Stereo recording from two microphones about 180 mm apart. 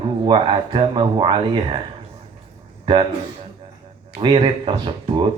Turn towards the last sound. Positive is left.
turn(degrees=-25)  # may be behind; listen again after turning